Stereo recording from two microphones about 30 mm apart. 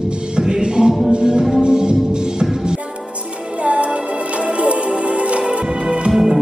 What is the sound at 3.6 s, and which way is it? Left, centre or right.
Music, right.